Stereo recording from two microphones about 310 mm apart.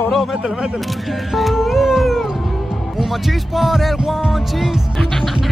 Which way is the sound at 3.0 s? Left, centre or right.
Centre.